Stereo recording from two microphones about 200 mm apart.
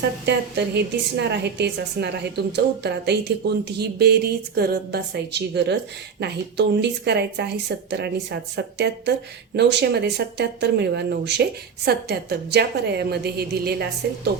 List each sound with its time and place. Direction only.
0.3 s a woman's voice: 55° right (ahead or behind)